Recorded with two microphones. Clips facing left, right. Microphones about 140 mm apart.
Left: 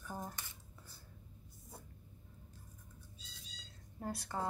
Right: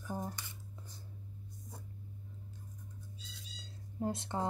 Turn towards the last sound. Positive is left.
turn(degrees=-20)  # may be behind; listen again after turning